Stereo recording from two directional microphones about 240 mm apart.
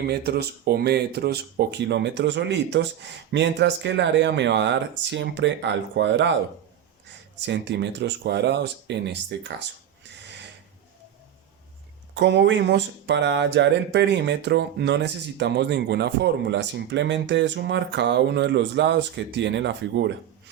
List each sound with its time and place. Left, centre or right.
0.1 s speech: right
7.4 s speech: right
12.1 s speech: right